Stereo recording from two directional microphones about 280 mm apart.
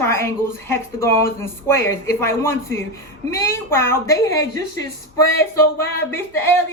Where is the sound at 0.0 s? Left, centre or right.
Centre.